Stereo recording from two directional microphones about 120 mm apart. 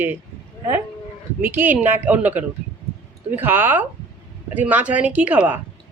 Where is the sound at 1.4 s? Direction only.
15° right (ahead or behind).